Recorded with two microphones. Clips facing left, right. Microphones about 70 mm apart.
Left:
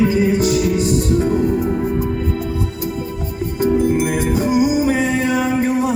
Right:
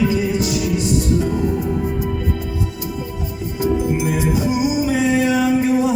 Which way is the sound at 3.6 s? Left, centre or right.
Left.